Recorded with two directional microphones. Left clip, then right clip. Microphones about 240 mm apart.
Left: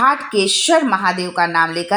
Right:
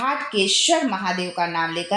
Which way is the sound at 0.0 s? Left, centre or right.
Left.